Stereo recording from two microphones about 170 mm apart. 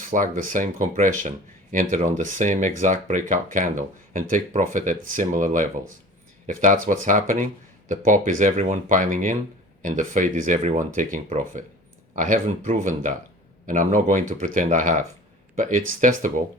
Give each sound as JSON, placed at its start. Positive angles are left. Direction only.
{"t": 0.0, "sound": "speech", "side_deg": -50}